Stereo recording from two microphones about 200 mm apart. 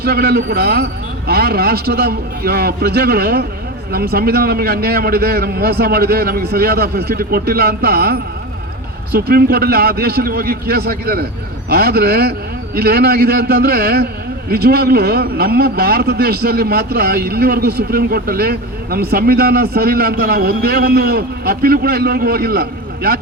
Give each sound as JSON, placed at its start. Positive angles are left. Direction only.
{"t": 0.0, "sound": "a man's voice", "side_deg": -50}